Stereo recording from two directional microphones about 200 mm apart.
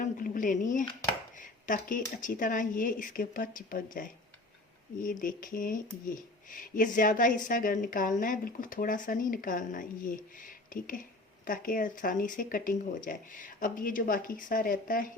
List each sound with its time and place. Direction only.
0.0 s speech: 40° left (ahead or behind)